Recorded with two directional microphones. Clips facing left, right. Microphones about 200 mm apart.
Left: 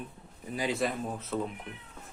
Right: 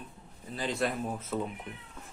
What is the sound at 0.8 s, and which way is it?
Speech, 5° right (ahead or behind).